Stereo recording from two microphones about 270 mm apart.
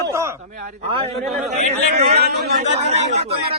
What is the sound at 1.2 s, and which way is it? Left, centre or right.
Speech, centre.